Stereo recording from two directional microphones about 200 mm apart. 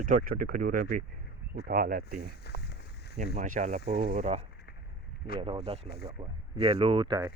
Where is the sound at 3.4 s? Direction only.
40° right (ahead or behind).